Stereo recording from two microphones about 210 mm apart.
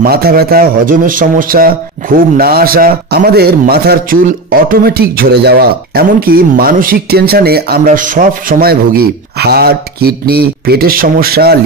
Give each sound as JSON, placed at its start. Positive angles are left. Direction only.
{"t": 0.0, "sound": "a man's voice", "side_deg": -45}